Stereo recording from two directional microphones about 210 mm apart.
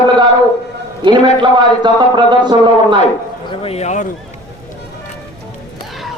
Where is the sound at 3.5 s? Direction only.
30° left (ahead or behind).